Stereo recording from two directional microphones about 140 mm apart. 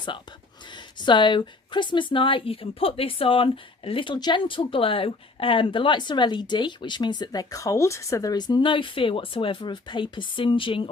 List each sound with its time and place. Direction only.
0.7 s a woman's voice: 35° left (ahead or behind)